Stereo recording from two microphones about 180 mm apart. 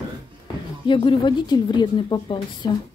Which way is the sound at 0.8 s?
25° left (ahead or behind).